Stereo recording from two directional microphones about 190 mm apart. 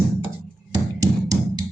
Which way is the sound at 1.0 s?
20° right (ahead or behind).